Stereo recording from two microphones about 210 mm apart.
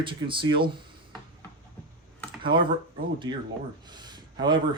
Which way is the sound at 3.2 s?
20° right (ahead or behind).